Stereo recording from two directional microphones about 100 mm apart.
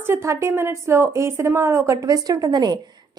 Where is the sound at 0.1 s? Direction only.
30° right (ahead or behind).